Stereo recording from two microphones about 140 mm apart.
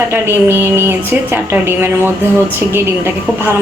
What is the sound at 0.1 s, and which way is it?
A woman's voice, 15° right (ahead or behind).